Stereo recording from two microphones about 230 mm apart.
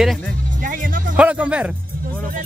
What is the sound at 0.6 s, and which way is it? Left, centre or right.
Speech, right.